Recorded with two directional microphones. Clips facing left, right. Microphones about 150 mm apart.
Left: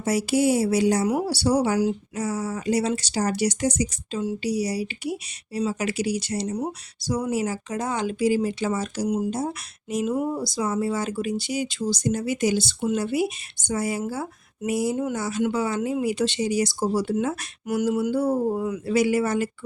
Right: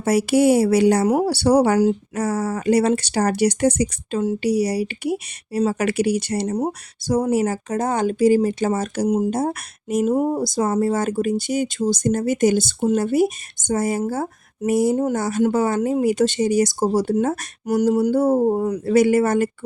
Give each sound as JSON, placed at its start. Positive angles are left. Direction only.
{"t": 0.0, "sound": "speech", "side_deg": -60}